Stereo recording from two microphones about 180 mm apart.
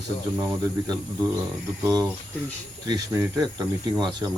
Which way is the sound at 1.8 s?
20° right (ahead or behind).